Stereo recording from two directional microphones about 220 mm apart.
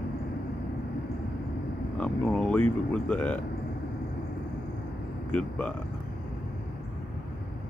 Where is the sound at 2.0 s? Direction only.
5° left (ahead or behind).